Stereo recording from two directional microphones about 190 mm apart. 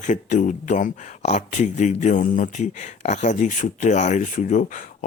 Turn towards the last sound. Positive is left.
turn(degrees=40)  # may be behind; listen again after turning